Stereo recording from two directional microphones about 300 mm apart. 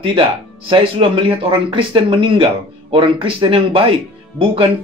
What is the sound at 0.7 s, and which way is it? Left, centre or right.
Speech, centre.